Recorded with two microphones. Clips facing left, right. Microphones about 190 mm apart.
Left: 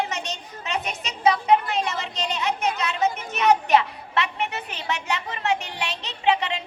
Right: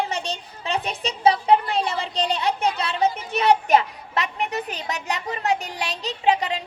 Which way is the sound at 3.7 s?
40° right (ahead or behind).